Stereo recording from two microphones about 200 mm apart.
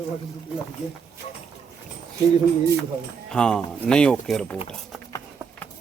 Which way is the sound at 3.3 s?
5° left (ahead or behind).